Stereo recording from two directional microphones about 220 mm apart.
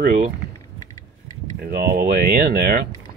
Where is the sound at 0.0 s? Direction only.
35° right (ahead or behind).